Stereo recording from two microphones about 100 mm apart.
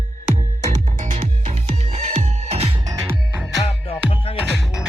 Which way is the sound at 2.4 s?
90° right.